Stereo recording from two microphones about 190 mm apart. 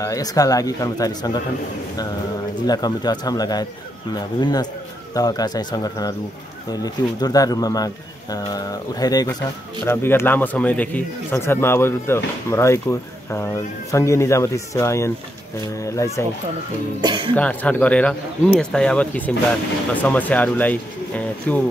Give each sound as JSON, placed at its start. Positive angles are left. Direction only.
{"t": 0.0, "sound": "speech", "side_deg": 20}
{"t": 2.6, "sound": "speech", "side_deg": 20}
{"t": 17.0, "sound": "speech", "side_deg": -25}
{"t": 17.4, "sound": "speech", "side_deg": 10}